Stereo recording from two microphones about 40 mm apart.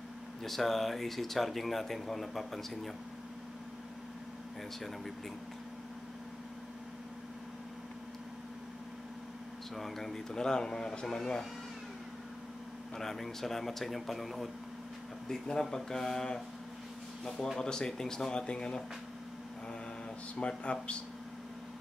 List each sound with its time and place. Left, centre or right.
0.4 s speech: centre
9.8 s a man's voice: centre
12.9 s speech: centre
15.2 s a man's voice: centre
17.6 s a man's voice: centre
20.3 s speech: left